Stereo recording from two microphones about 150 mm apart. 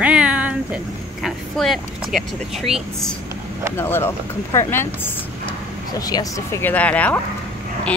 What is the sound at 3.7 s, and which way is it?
Speech, 15° left (ahead or behind).